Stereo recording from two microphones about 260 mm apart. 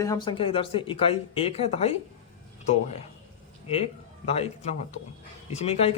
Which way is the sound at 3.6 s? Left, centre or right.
Left.